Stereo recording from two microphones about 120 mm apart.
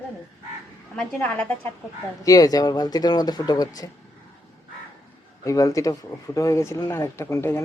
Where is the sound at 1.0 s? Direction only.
10° left (ahead or behind).